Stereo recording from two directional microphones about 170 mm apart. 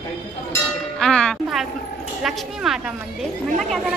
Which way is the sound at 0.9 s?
5° left (ahead or behind).